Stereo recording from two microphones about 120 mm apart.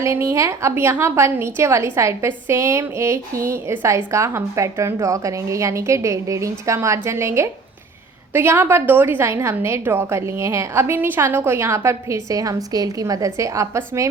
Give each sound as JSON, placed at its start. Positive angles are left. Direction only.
{"t": 0.0, "sound": "a woman's voice", "side_deg": -25}